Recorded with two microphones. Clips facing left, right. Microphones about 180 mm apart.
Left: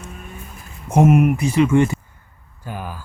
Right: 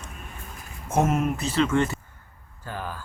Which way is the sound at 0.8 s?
15° left (ahead or behind).